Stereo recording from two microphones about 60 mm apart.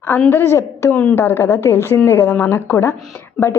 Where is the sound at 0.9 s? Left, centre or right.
Left.